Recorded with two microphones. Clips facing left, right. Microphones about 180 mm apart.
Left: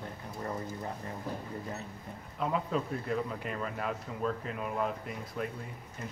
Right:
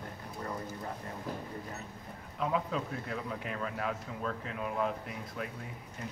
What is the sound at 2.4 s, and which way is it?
A man's voice, centre (ahead or behind).